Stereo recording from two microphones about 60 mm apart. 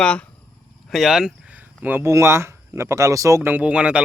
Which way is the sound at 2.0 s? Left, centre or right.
Right.